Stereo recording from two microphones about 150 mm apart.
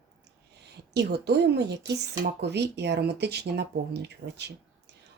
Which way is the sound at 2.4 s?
90° right.